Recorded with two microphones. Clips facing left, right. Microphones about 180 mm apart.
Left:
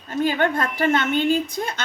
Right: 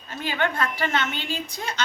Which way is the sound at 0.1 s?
45° left (ahead or behind).